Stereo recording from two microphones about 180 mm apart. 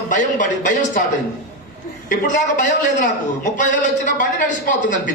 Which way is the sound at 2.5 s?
45° left (ahead or behind).